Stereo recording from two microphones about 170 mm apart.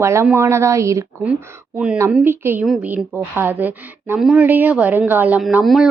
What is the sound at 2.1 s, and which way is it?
A woman's voice, 10° right (ahead or behind).